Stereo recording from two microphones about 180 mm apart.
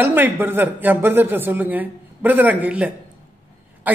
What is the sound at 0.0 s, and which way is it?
Speech, 10° right (ahead or behind).